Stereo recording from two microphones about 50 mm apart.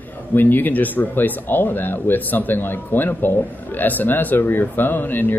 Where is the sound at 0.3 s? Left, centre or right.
Left.